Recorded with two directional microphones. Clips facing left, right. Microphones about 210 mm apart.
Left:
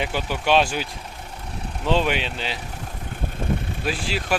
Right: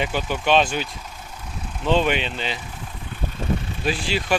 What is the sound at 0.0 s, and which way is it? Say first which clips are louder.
Speech: right 1 dB; 10° left (ahead or behind).